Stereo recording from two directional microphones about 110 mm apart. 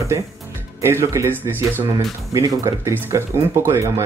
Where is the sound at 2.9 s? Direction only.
25° right (ahead or behind).